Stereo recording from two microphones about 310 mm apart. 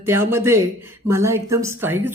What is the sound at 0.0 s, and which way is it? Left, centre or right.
Speech, centre.